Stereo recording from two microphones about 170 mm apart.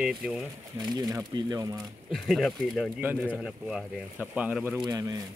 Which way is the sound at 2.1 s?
Centre (ahead or behind).